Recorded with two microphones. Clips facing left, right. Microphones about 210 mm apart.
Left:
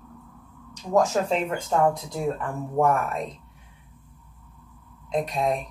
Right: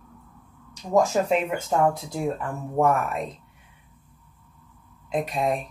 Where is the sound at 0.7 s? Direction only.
10° right (ahead or behind).